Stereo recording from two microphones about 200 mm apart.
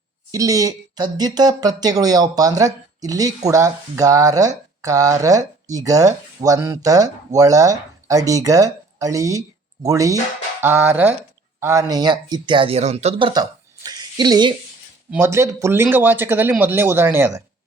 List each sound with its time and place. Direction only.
0.3 s speech: 15° right (ahead or behind)